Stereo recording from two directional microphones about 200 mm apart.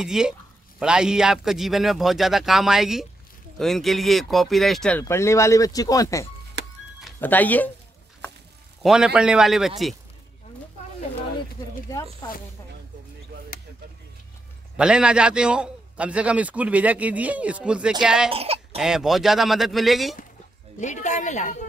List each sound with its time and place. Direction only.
0.0 s speech: 5° right (ahead or behind)
5.0 s speech: 15° left (ahead or behind)
6.6 s music: 60° right (ahead or behind)
7.2 s speech: 10° left (ahead or behind)
8.8 s speech: 5° right (ahead or behind)
14.8 s a man's voice: 5° right (ahead or behind)
18.3 s speech: 30° right (ahead or behind)
18.8 s speech: 5° right (ahead or behind)
20.8 s a woman's voice: 35° left (ahead or behind)